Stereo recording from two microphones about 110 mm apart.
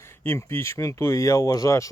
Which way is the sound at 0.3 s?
25° left (ahead or behind).